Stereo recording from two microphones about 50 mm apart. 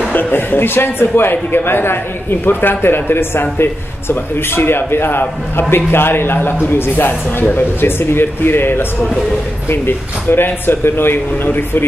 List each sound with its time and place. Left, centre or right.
0.1 s a man's voice: left